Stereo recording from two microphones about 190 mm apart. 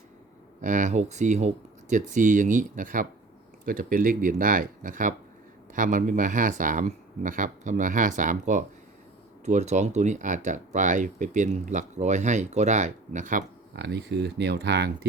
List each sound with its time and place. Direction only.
0.6 s speech: 40° right (ahead or behind)
13.7 s speech: 65° right (ahead or behind)